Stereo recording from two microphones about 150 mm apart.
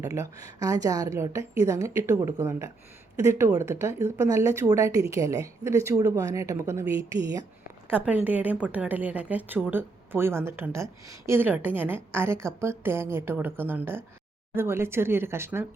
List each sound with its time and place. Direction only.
0.0 s a woman's voice: 20° right (ahead or behind)
7.9 s a woman's voice: 10° right (ahead or behind)